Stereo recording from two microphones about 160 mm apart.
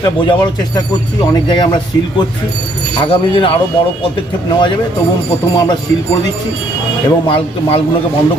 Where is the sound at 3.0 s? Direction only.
30° left (ahead or behind).